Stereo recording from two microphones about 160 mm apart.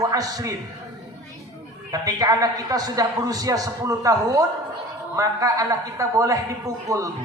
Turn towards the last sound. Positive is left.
turn(degrees=-20)  # may be behind; listen again after turning